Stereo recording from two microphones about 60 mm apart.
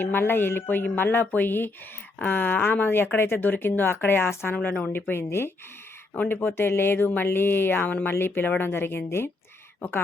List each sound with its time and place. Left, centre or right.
0.0 s speech: left
4.5 s a woman's voice: left
4.9 s speech: left